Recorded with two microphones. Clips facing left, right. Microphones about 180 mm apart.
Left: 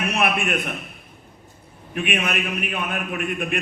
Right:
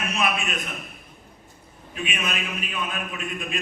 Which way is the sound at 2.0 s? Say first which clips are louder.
Left 5 dB; 60° left (ahead or behind).